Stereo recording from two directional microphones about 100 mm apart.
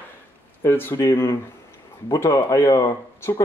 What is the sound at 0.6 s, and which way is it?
Speech, 25° left (ahead or behind).